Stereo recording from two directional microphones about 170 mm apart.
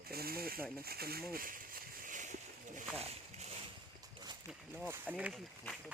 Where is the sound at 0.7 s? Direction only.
65° right (ahead or behind); by 3.6 s 40° right (ahead or behind).